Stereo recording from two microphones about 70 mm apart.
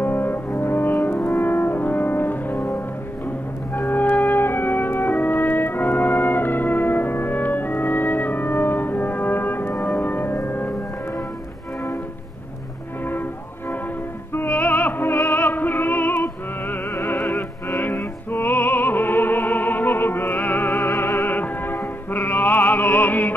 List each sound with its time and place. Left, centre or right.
0.0 s brass instrument: left
3.7 s music: left
4.3 s brass instrument: left
14.3 s music: left
17.6 s opera: left
20.9 s music: left
21.3 s music: left